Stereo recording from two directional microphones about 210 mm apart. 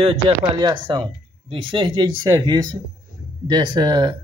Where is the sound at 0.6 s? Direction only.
20° right (ahead or behind).